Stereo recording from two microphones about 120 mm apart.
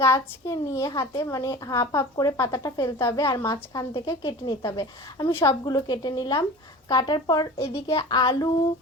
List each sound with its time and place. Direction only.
0.0 s speech: 25° left (ahead or behind)
7.6 s a woman's voice: 50° left (ahead or behind)